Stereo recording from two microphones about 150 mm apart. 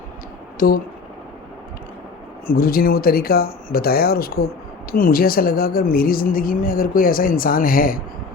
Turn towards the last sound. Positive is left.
turn(degrees=70)  # may be behind; listen again after turning